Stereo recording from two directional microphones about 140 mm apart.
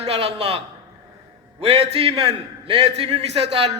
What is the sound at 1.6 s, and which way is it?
A man's voice, 45° right (ahead or behind).